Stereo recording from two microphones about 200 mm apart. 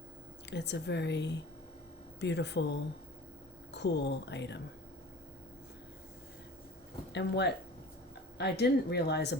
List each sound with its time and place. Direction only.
0.5 s speech: 60° left (ahead or behind)
7.1 s speech: 60° left (ahead or behind)